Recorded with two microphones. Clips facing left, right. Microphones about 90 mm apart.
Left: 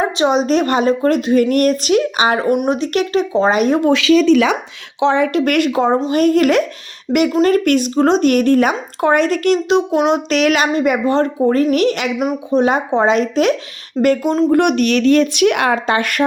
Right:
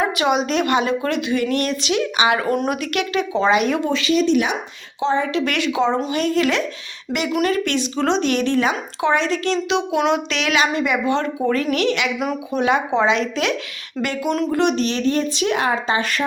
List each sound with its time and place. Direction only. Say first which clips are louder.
0.0 s a woman's voice: left 4 dB; 35° left (ahead or behind)
2.5 s speech: left 5 dB; 20° left (ahead or behind)
2.8 s a woman's voice: left 5 dB; 35° left (ahead or behind)
4.9 s a woman's voice: left 5 dB; 70° left (ahead or behind); by 13.6 s 40° left (ahead or behind)
14.3 s a woman's voice: left 6 dB; 30° left (ahead or behind)
14.5 s speech: left 6 dB; 60° left (ahead or behind)